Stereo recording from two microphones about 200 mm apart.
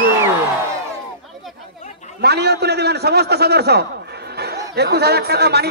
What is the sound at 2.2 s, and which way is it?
A man's voice, 55° right (ahead or behind).